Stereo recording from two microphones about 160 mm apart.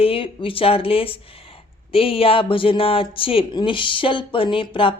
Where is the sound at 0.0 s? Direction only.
35° left (ahead or behind).